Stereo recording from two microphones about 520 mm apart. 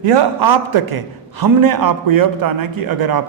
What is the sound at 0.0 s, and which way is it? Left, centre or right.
A man's voice, right.